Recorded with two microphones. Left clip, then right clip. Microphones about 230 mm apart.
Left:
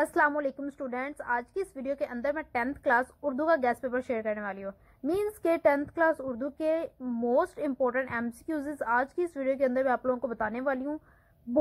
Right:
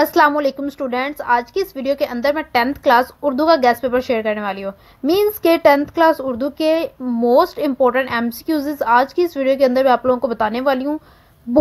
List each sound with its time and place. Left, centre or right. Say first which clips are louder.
0.0 s a woman's voice: right 12 dB; right